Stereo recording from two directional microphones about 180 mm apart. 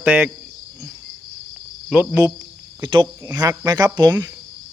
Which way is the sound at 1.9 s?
15° right (ahead or behind).